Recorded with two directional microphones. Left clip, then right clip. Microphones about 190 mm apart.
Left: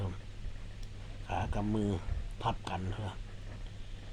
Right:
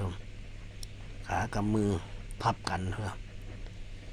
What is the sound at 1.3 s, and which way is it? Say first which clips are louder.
Speech: right 4 dB; 30° right (ahead or behind).